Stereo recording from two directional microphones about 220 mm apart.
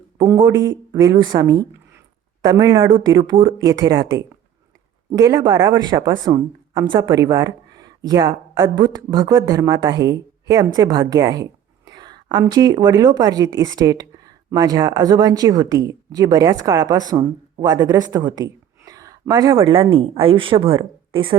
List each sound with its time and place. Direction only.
0.9 s speech: 15° right (ahead or behind)